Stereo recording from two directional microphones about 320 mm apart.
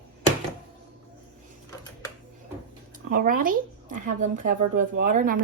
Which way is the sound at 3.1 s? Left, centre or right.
Right.